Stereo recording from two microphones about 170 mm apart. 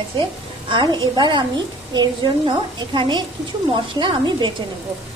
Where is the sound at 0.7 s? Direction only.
25° right (ahead or behind).